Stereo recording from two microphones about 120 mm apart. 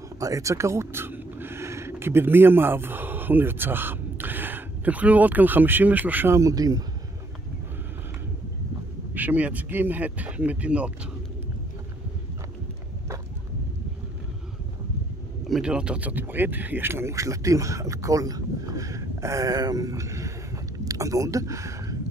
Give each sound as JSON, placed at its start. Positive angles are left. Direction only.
{"t": 0.2, "sound": "speech", "side_deg": -25}
{"t": 9.1, "sound": "speech", "side_deg": -15}
{"t": 15.4, "sound": "speech", "side_deg": -5}